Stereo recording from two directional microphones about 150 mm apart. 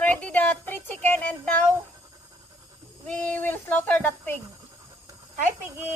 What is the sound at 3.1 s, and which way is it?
Child singing, 10° left (ahead or behind).